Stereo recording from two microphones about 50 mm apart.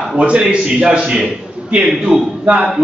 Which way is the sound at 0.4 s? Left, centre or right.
Centre.